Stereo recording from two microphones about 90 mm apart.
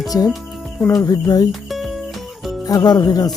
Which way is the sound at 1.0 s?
45° left (ahead or behind).